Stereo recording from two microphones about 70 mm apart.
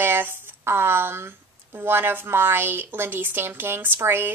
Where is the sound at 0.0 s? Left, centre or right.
Right.